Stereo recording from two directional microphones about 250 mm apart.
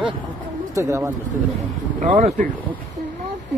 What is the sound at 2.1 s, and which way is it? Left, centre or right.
Speech, right.